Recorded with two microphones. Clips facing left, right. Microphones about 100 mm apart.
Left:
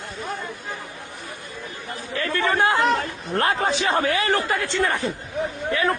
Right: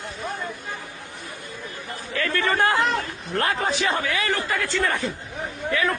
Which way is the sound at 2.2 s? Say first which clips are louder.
Left 1 dB; 20° left (ahead or behind).